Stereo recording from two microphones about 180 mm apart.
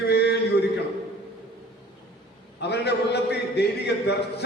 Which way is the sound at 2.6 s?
65° left (ahead or behind).